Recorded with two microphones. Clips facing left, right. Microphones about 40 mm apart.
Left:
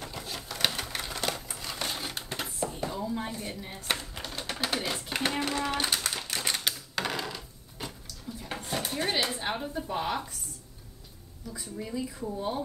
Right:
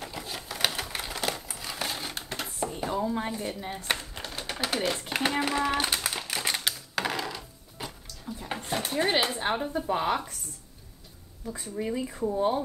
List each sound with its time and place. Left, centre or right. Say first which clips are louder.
0.0 s typewriter: right 1 dB; centre
2.6 s a sound: right 1 dB; centre
2.9 s a sound: right 4 dB; right
3.3 s speech: right 4 dB; right
3.7 s typewriter: right 2 dB; centre
4.8 s a sound: right 3 dB; centre
8.5 s dishes: right 2 dB; centre
8.9 s speech: right 5 dB; right
11.4 s speech: right 6 dB; right